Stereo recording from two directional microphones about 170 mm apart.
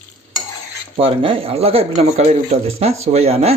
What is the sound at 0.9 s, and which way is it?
Speech, 30° right (ahead or behind).